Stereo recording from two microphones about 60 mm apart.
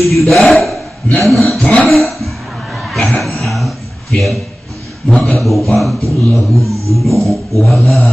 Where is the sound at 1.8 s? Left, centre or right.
Centre.